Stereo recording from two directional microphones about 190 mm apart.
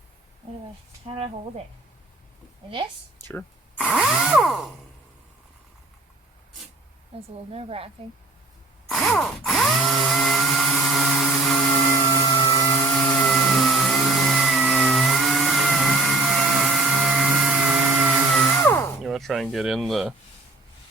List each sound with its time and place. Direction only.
1.0 s speech: 30° right (ahead or behind)
2.6 s a woman's voice: 25° right (ahead or behind)
3.8 s a sound: centre (ahead or behind)
7.1 s speech: 30° right (ahead or behind)
8.9 s drill: centre (ahead or behind)
12.3 s a sound: 25° left (ahead or behind)
13.1 s a sound: 5° left (ahead or behind)
18.6 s music: 15° left (ahead or behind)
19.0 s speech: centre (ahead or behind)